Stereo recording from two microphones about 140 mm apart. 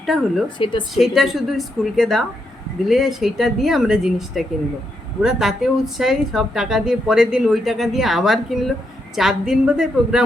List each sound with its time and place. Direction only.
0.0 s speech: centre (ahead or behind)
0.6 s speech: 35° left (ahead or behind)
0.9 s speech: centre (ahead or behind)